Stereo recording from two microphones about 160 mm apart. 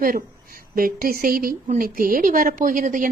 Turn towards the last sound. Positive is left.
turn(degrees=-55)  # may be behind; listen again after turning